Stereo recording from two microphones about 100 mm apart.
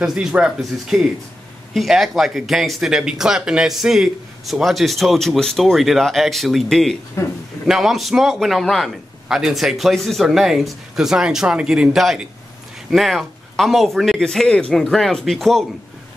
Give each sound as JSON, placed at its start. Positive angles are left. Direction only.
{"t": 0.0, "sound": "speech", "side_deg": -5}